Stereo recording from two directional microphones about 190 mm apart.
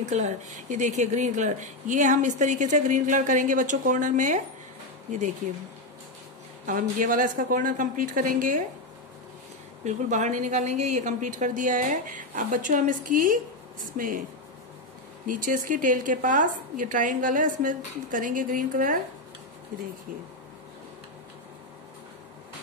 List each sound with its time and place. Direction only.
0.0 s speech: 40° right (ahead or behind)
6.6 s a woman's voice: 45° right (ahead or behind)
9.8 s a woman's voice: 40° right (ahead or behind)
15.2 s a woman's voice: 45° right (ahead or behind)